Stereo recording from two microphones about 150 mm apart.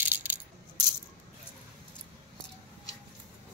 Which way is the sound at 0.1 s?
15° right (ahead or behind).